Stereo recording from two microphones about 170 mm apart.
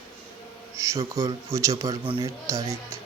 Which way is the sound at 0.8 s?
20° right (ahead or behind).